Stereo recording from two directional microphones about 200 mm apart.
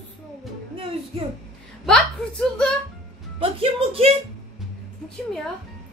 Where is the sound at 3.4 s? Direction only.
30° right (ahead or behind).